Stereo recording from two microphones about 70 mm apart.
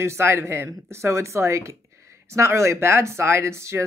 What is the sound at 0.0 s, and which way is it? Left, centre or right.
Speech, right.